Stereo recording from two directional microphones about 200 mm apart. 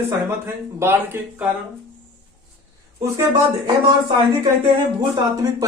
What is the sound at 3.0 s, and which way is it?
A man's voice, 20° right (ahead or behind).